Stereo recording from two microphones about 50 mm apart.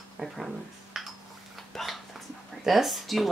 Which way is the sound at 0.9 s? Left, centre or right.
Centre.